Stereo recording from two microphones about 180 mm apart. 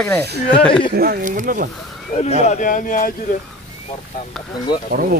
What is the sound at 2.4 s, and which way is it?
Speech, 45° left (ahead or behind).